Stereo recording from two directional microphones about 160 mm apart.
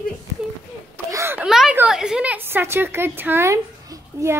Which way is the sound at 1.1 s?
15° right (ahead or behind).